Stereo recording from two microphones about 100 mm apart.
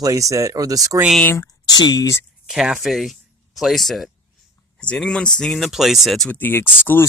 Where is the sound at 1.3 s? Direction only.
40° left (ahead or behind).